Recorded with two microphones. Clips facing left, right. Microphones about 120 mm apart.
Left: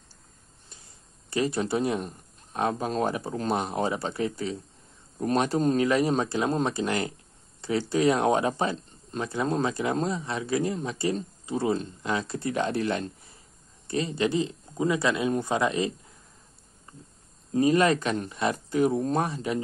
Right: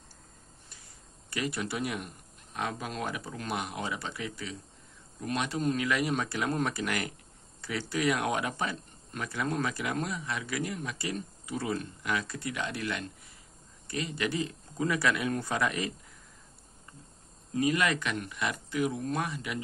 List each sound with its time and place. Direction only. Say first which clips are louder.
1.3 s speech: left 8 dB; 30° left (ahead or behind)
17.5 s speech: left 7 dB; 35° left (ahead or behind)